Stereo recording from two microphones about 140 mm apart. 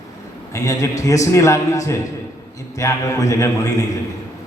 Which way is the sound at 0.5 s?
20° left (ahead or behind).